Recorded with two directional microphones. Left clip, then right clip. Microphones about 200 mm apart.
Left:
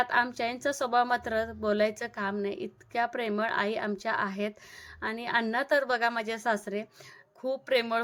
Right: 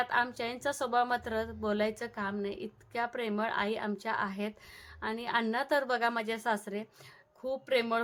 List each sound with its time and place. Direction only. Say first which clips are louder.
0.0 s a woman's voice: left 4 dB; 15° left (ahead or behind)